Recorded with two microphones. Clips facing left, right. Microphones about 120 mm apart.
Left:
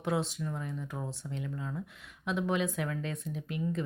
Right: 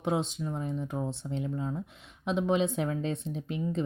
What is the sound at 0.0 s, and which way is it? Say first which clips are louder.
Speech: right 2 dB; 20° right (ahead or behind).